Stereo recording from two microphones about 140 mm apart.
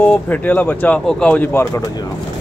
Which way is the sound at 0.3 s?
10° left (ahead or behind).